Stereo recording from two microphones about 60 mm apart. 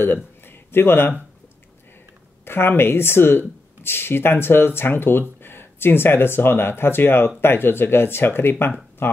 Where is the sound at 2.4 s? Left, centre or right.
Left.